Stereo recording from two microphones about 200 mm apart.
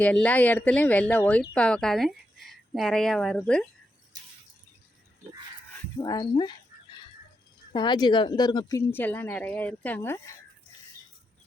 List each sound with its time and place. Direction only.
0.0 s speech: 5° left (ahead or behind)
6.0 s speech: 20° left (ahead or behind)
7.7 s speech: 20° left (ahead or behind)
8.9 s speech: 10° left (ahead or behind)